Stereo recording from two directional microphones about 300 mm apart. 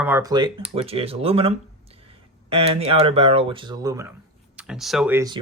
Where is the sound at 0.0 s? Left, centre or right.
Centre.